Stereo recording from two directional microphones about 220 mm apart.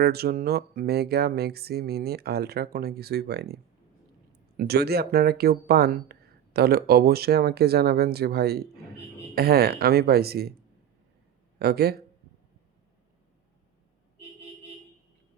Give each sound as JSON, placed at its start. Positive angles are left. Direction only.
{"t": 0.0, "sound": "speech", "side_deg": -45}
{"t": 11.6, "sound": "speech", "side_deg": -45}